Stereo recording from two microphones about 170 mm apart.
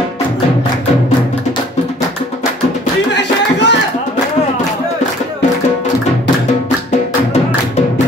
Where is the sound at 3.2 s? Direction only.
90° left.